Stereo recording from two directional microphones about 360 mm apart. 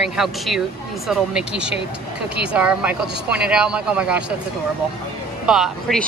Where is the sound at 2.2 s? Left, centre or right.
Right.